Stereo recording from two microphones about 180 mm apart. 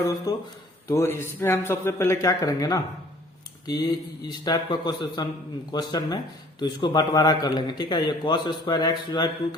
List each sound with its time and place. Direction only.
0.0 s a man's voice: 20° left (ahead or behind)